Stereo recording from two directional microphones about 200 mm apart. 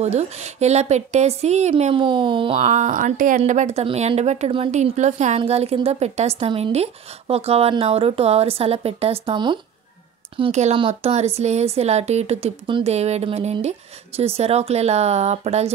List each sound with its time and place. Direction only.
0.0 s a woman's voice: 35° right (ahead or behind)